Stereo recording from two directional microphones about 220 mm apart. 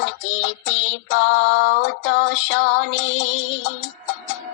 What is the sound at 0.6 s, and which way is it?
Female singing, 60° left (ahead or behind).